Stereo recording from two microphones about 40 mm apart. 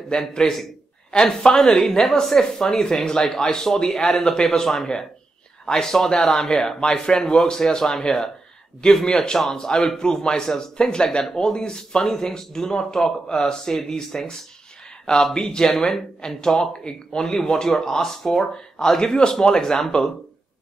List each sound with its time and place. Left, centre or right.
0.1 s speech: centre
15.3 s speech: centre